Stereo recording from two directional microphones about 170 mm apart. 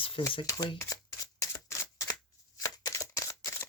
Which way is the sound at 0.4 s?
20° left (ahead or behind).